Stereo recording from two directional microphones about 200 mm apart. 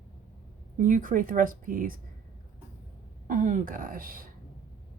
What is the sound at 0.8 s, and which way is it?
Speech, 40° right (ahead or behind).